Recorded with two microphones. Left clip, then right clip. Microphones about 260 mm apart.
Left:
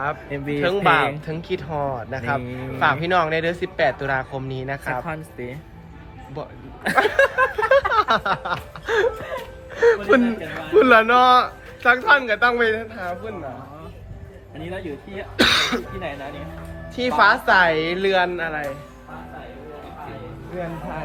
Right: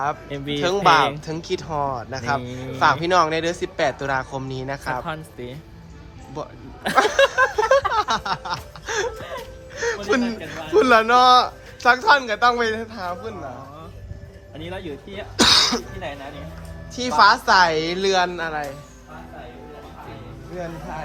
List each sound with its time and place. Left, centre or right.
0.0 s speech: centre
15.4 s speech: centre
16.9 s speech: centre